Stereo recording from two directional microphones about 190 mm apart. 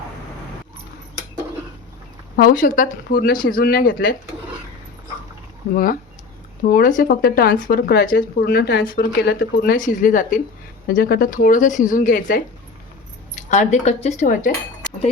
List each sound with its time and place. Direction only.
2.3 s speech: 50° left (ahead or behind)
5.7 s speech: 50° left (ahead or behind)
13.5 s speech: 40° left (ahead or behind)